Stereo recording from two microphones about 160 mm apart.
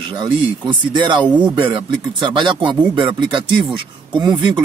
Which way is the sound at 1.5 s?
30° right (ahead or behind).